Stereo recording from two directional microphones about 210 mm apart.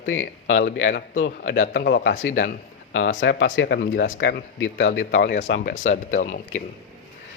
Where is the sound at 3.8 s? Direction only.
45° left (ahead or behind).